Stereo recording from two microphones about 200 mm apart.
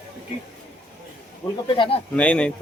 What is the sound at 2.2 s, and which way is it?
Speech, 5° left (ahead or behind).